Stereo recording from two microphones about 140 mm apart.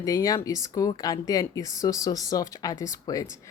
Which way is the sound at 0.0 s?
25° left (ahead or behind).